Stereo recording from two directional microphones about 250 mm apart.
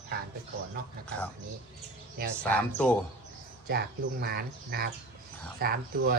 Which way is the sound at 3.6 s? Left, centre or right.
Right.